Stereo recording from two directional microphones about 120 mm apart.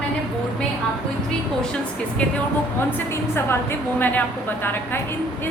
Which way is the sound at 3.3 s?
20° left (ahead or behind).